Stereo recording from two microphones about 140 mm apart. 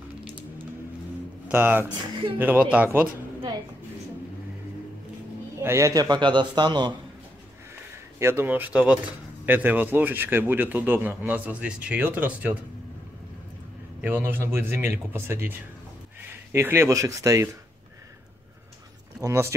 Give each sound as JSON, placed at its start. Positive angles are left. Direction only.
{"t": 1.5, "sound": "a man's voice", "side_deg": -15}
{"t": 5.6, "sound": "a man's voice", "side_deg": -20}
{"t": 8.2, "sound": "a man's voice", "side_deg": -15}
{"t": 14.0, "sound": "a man's voice", "side_deg": -15}
{"t": 16.5, "sound": "speech", "side_deg": -20}
{"t": 19.2, "sound": "speech", "side_deg": -20}